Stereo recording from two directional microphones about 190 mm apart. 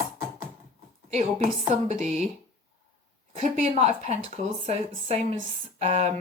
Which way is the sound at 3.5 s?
35° right (ahead or behind).